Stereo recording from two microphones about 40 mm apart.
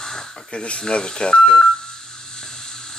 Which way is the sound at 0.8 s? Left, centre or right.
Left.